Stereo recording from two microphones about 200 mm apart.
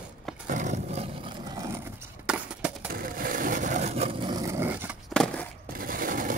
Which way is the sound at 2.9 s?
45° right (ahead or behind).